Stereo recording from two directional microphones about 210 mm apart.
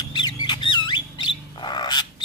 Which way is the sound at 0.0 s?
20° left (ahead or behind).